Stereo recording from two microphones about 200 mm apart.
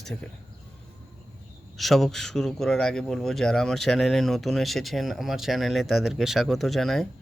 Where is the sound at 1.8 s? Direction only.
Centre (ahead or behind).